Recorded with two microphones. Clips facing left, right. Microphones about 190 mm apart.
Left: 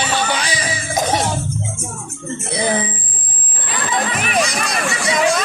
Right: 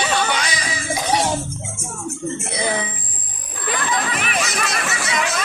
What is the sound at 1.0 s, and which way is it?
Music, 45° left (ahead or behind).